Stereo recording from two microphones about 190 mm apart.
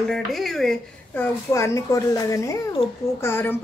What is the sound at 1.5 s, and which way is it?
A child's voice, 15° left (ahead or behind).